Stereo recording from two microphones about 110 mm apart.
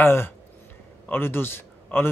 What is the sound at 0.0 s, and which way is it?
A man's voice, 20° left (ahead or behind).